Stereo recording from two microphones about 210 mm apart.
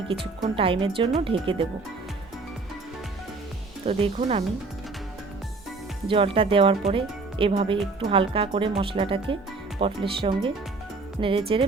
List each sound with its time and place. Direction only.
0.1 s speech: 25° right (ahead or behind)
3.8 s speech: 30° right (ahead or behind)
6.1 s speech: 25° right (ahead or behind)